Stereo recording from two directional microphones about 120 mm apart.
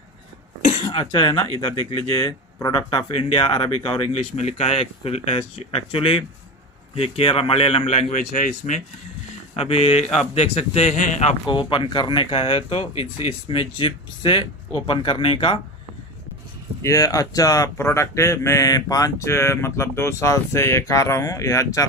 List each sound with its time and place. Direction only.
0.7 s speech: 45° left (ahead or behind)
4.1 s speech: 60° left (ahead or behind); by 8.8 s 90° left
9.6 s speech: 55° left (ahead or behind)
10.1 s a man's voice: 65° left (ahead or behind)
11.4 s speech: 40° left (ahead or behind)
16.8 s speech: 30° left (ahead or behind)